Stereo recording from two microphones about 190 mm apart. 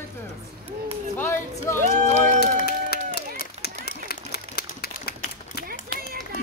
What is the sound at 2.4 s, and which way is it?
Run, 55° left (ahead or behind).